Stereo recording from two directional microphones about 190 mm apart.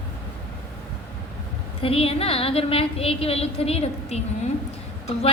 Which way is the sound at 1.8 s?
30° left (ahead or behind).